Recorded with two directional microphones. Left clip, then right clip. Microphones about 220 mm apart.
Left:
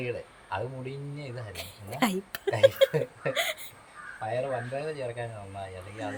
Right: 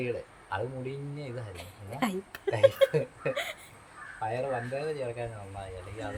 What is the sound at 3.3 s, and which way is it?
Speech, 45° left (ahead or behind).